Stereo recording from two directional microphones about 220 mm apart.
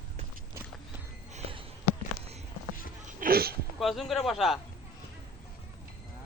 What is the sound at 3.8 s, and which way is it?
Speech, centre (ahead or behind).